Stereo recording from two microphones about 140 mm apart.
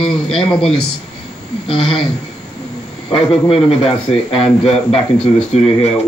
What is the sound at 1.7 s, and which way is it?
Speech, 40° left (ahead or behind).